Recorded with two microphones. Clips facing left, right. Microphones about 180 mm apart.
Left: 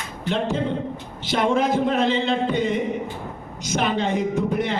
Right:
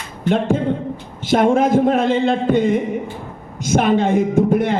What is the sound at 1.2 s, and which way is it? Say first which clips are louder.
A man's voice: right 6 dB; 50° right (ahead or behind).